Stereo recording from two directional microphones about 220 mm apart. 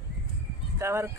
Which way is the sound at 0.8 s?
10° right (ahead or behind).